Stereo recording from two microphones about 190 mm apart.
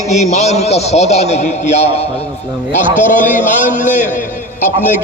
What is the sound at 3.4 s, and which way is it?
Speech, 40° left (ahead or behind).